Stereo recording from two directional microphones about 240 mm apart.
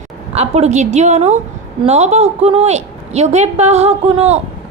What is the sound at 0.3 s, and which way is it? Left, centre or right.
A woman's voice, right.